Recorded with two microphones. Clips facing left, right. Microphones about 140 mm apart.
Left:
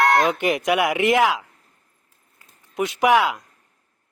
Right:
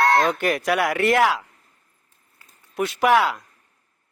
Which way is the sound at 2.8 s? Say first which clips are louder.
Left 1 dB; 15° left (ahead or behind).